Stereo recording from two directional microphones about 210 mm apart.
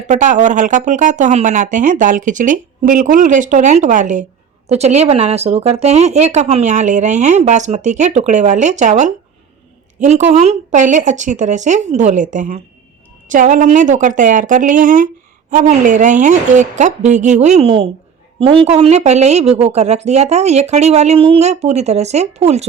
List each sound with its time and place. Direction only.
0.1 s speech: 35° right (ahead or behind)